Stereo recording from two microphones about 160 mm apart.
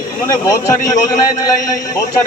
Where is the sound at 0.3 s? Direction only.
20° left (ahead or behind).